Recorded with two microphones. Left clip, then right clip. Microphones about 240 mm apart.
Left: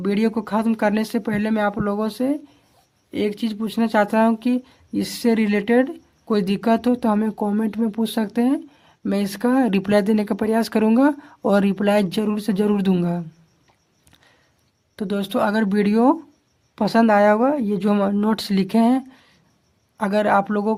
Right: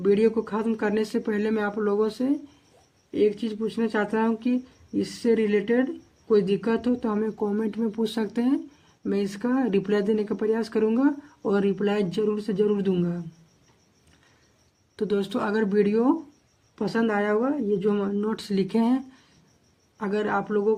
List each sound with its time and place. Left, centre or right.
0.0 s speech: left
14.9 s speech: left